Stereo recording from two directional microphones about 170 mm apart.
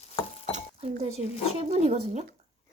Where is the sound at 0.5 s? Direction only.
40° right (ahead or behind).